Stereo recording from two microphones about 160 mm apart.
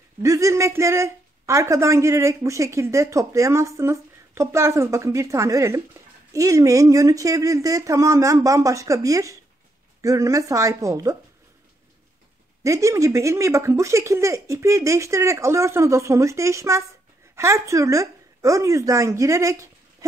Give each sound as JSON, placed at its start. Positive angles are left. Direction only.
{"t": 0.2, "sound": "speech", "side_deg": -20}
{"t": 12.6, "sound": "speech", "side_deg": -20}